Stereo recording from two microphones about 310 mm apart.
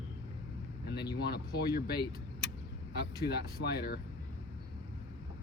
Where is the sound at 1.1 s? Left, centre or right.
Left.